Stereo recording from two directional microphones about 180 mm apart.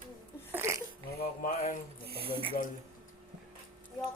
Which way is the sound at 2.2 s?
30° right (ahead or behind).